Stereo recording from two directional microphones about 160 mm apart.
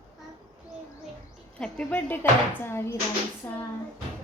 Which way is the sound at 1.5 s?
5° left (ahead or behind).